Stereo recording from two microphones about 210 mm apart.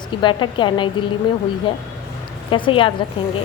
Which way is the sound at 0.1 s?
20° left (ahead or behind).